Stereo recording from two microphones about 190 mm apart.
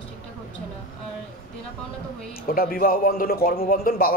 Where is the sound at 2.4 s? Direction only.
50° left (ahead or behind).